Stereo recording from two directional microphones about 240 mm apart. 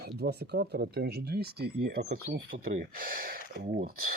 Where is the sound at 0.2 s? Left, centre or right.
Right.